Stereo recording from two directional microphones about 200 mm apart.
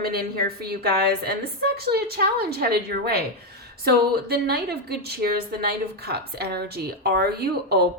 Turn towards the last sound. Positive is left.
turn(degrees=-50)  # may be behind; listen again after turning